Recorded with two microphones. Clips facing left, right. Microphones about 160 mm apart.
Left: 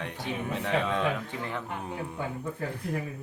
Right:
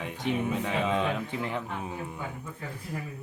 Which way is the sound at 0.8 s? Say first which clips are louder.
Right 1 dB; 15° right (ahead or behind).